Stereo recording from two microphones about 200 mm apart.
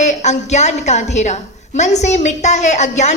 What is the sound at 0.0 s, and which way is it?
A woman's voice, 35° left (ahead or behind).